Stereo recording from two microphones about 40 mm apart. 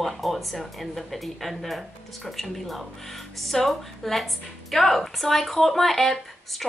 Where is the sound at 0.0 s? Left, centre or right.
Centre.